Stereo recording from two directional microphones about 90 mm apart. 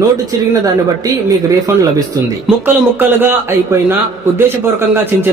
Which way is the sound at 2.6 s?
20° right (ahead or behind).